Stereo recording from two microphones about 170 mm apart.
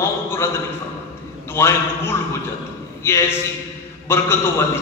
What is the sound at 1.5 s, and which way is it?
A man's voice, 15° left (ahead or behind).